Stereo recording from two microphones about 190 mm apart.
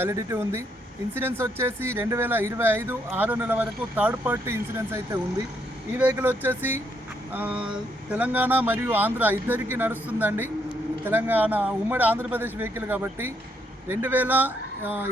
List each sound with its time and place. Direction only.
0.0 s speech: 15° right (ahead or behind)